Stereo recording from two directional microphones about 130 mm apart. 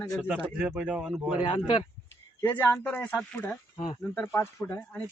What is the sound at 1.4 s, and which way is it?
Speech, 35° left (ahead or behind).